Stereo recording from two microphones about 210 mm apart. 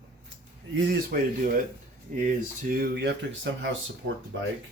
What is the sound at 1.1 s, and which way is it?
Speech, 40° right (ahead or behind).